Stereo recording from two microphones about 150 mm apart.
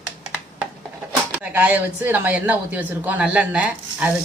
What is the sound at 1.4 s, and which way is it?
A woman's voice, 10° right (ahead or behind).